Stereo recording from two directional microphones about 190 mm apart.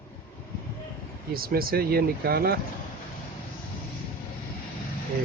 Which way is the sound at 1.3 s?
50° right (ahead or behind).